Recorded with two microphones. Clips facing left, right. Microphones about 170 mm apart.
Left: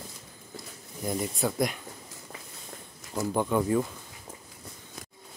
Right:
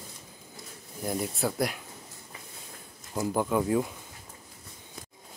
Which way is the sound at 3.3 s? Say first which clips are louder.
Left 1 dB; 5° right (ahead or behind).